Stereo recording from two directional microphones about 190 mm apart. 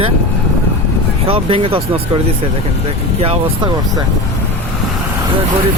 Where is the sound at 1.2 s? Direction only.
30° right (ahead or behind).